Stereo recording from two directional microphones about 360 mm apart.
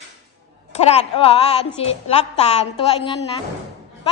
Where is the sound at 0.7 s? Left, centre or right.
Centre.